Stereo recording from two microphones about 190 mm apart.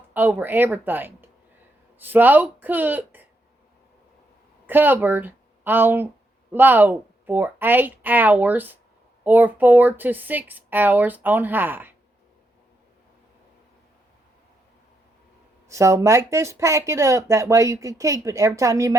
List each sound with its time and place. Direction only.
0.1 s speech: 10° right (ahead or behind)
4.6 s speech: 10° right (ahead or behind)
15.7 s speech: 15° right (ahead or behind)